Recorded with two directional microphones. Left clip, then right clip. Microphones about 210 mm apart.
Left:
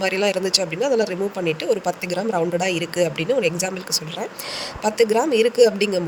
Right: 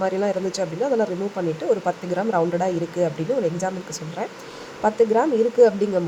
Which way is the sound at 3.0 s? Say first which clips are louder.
Left 2 dB; 45° left (ahead or behind).